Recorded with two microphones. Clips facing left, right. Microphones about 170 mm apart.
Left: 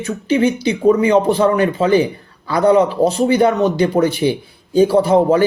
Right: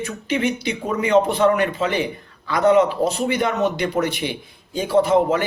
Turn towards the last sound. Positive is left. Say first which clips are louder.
# left 4 dB
turn(degrees=35)  # may be behind; listen again after turning